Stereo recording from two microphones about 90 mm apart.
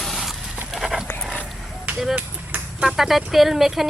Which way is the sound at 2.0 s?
5° right (ahead or behind).